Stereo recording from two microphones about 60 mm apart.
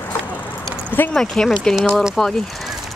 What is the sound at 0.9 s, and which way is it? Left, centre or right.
Speech, left.